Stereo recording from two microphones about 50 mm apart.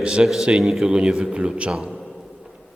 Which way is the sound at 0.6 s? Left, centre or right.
Centre.